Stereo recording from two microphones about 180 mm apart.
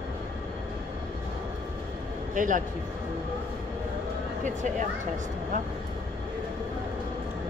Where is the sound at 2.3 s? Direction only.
45° right (ahead or behind).